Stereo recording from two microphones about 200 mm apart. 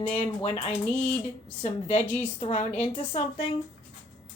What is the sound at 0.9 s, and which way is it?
Speech, 10° left (ahead or behind).